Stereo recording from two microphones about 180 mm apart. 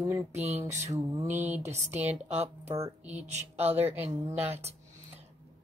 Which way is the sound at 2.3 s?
35° right (ahead or behind).